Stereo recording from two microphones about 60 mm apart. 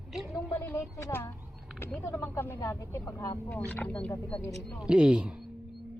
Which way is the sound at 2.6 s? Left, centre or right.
Left.